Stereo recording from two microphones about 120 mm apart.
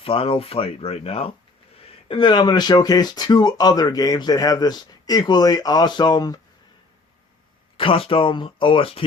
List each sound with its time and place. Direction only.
0.0 s speech: 50° left (ahead or behind); by 6.4 s 35° left (ahead or behind)
7.8 s speech: 50° left (ahead or behind)